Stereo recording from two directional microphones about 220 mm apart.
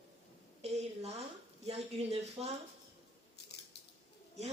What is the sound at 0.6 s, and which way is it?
Speech, 30° right (ahead or behind).